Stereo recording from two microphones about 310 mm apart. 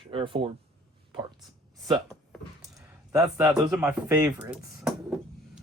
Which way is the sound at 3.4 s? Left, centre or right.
Centre.